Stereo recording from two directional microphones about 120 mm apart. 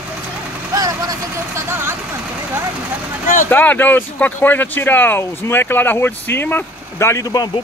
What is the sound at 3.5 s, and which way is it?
Speech, 15° left (ahead or behind).